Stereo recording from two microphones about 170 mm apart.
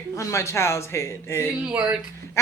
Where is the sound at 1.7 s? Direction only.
5° right (ahead or behind).